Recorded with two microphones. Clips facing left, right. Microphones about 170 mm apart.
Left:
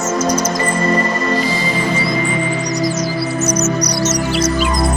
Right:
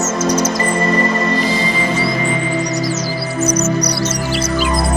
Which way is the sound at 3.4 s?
30° right (ahead or behind).